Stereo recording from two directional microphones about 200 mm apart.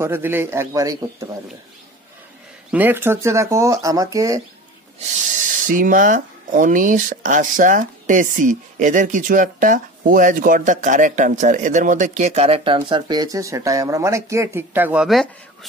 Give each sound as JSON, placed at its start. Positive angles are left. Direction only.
{"t": 0.0, "sound": "speech", "side_deg": -10}
{"t": 2.7, "sound": "speech", "side_deg": -10}
{"t": 4.9, "sound": "speech", "side_deg": -40}